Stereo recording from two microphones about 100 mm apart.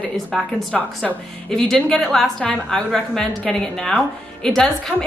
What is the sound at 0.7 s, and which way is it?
Speech, 15° left (ahead or behind).